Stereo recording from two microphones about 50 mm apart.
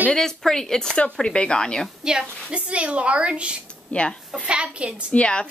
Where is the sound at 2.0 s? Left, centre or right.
Centre.